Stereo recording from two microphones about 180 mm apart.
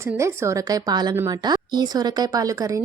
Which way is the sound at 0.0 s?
15° right (ahead or behind).